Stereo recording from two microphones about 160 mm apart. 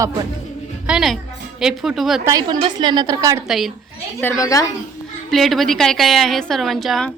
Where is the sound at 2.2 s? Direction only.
25° right (ahead or behind).